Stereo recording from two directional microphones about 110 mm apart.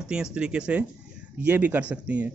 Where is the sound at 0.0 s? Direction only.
5° right (ahead or behind).